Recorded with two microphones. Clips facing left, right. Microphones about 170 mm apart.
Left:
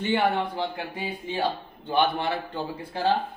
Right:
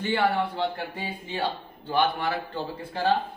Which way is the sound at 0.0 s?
20° left (ahead or behind).